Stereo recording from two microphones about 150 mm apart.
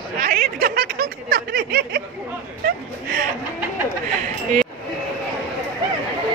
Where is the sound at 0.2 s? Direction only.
70° right (ahead or behind); by 2.0 s 90° right.